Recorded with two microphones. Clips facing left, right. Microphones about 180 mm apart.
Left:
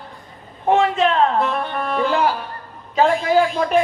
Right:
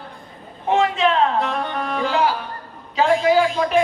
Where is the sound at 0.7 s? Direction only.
50° left (ahead or behind).